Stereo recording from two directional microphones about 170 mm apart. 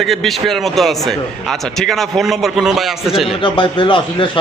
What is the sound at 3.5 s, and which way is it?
Speech, 30° left (ahead or behind).